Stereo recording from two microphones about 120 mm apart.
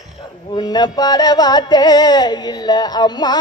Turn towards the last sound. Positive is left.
turn(degrees=35)  # may be behind; listen again after turning